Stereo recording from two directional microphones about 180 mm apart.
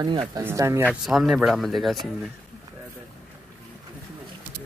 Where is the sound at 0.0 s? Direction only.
25° right (ahead or behind).